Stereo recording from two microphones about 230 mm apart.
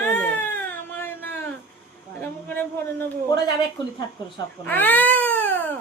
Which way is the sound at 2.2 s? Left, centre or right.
Centre.